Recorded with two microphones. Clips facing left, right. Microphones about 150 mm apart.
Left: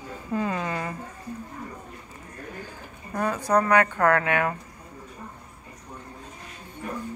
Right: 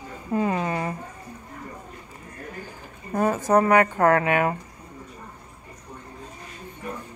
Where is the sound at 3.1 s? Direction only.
25° right (ahead or behind).